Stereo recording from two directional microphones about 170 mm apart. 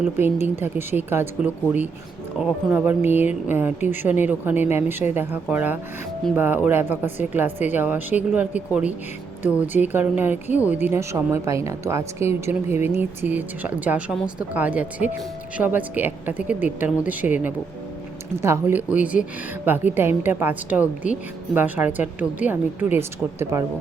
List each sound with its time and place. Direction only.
0.4 s speech: 10° right (ahead or behind)
12.5 s speech: 40° left (ahead or behind)
12.9 s speech: 10° right (ahead or behind)
18.4 s speech: 10° right (ahead or behind)